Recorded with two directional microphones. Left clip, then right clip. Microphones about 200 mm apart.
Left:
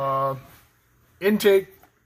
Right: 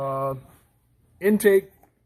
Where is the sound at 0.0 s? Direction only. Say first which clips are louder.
Left 3 dB; 25° right (ahead or behind).